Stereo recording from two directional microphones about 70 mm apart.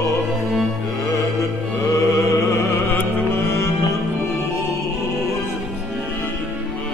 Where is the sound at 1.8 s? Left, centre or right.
Left.